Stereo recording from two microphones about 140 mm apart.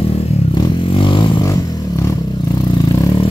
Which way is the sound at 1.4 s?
25° left (ahead or behind).